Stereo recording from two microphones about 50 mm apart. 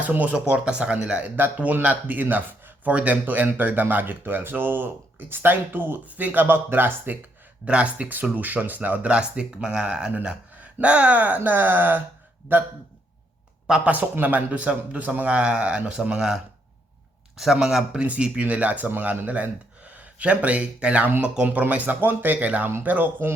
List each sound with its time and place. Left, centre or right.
0.0 s speech: right
0.3 s a man's voice: right
2.3 s a sound: right
2.9 s speech: right
6.1 s speech: right
7.6 s speech: right
9.1 s a man's voice: centre; by 12.7 s right
13.8 s a man's voice: right; by 18.0 s centre
18.0 s a man's voice: right